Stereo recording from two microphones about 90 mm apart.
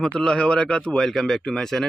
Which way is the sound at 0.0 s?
10° left (ahead or behind).